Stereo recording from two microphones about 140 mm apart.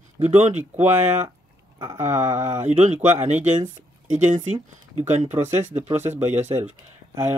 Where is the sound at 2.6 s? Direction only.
55° right (ahead or behind).